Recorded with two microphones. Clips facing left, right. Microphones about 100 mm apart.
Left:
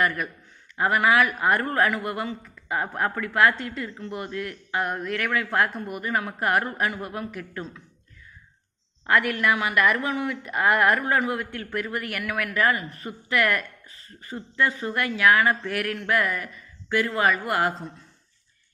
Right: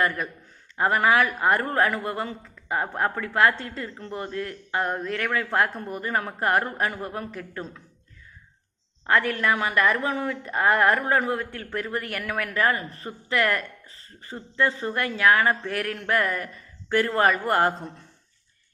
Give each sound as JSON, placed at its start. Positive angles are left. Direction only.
{"t": 0.8, "sound": "a woman's voice", "side_deg": -35}
{"t": 9.0, "sound": "a woman's voice", "side_deg": -30}